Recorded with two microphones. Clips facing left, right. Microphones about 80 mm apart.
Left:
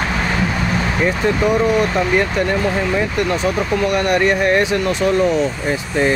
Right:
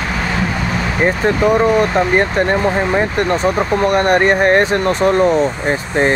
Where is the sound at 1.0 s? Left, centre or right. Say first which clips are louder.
Right 4 dB; right.